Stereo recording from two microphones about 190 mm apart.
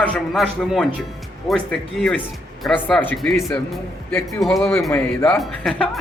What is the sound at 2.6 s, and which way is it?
Speech, centre (ahead or behind).